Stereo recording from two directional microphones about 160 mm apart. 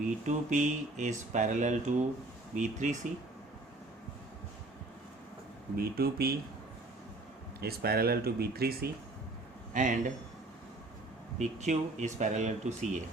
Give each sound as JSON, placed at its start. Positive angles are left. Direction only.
{"t": 0.0, "sound": "speech", "side_deg": -50}
{"t": 5.7, "sound": "speech", "side_deg": -70}
{"t": 7.6, "sound": "speech", "side_deg": -75}
{"t": 9.7, "sound": "speech", "side_deg": -50}
{"t": 11.3, "sound": "speech", "side_deg": -45}